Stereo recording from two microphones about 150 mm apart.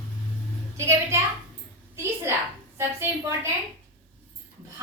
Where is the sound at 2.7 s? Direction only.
15° right (ahead or behind).